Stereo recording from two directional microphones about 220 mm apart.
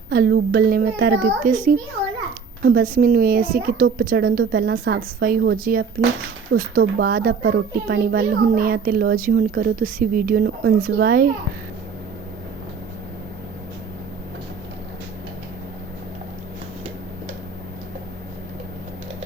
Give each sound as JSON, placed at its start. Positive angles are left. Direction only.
{"t": 0.1, "sound": "a woman's voice", "side_deg": -45}